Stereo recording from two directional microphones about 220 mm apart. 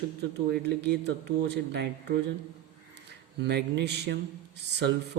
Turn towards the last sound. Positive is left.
turn(degrees=-50)  # may be behind; listen again after turning